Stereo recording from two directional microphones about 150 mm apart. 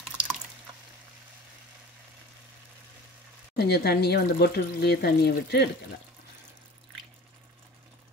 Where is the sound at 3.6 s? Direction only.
90° left.